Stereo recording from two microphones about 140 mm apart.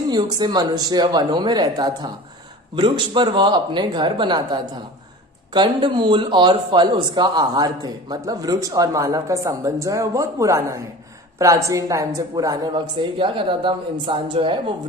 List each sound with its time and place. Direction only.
0.1 s speech: 30° right (ahead or behind)